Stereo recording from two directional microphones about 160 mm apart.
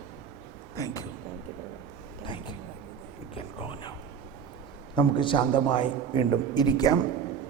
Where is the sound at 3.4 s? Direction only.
30° left (ahead or behind).